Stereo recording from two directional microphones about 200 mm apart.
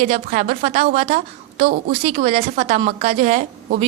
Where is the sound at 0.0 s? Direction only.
35° right (ahead or behind).